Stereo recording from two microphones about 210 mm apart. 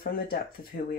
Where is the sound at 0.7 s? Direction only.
45° left (ahead or behind).